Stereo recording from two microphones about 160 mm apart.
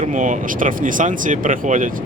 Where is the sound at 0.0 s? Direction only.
55° right (ahead or behind).